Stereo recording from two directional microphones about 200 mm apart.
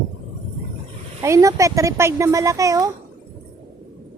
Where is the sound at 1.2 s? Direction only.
15° right (ahead or behind).